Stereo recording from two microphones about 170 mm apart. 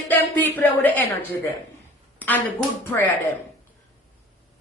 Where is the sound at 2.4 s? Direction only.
10° left (ahead or behind).